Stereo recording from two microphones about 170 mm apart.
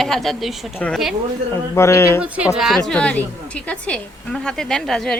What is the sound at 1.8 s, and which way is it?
Speech, 15° left (ahead or behind).